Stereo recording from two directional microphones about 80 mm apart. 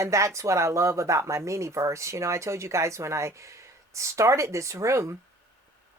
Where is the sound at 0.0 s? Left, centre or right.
Right.